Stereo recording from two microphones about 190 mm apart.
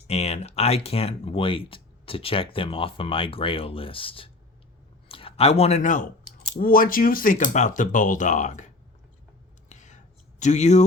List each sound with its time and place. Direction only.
0.1 s speech: 35° left (ahead or behind)
9.6 s a sound: 40° left (ahead or behind)
10.4 s speech: 40° left (ahead or behind)